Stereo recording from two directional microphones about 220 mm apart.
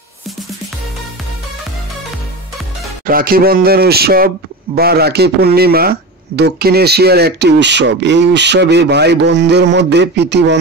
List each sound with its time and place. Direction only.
3.1 s speech: 40° right (ahead or behind)